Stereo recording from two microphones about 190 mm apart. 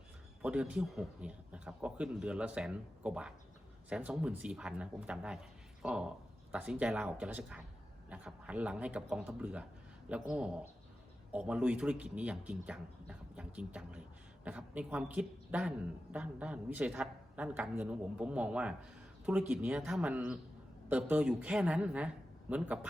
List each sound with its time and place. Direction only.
0.4 s a man's voice: 5° right (ahead or behind)